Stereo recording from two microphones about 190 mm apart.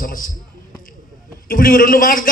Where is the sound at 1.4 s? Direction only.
50° left (ahead or behind).